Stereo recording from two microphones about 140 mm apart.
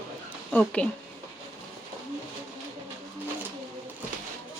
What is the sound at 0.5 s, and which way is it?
Speech, 10° left (ahead or behind).